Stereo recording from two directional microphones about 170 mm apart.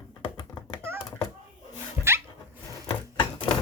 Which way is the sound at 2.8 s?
30° left (ahead or behind).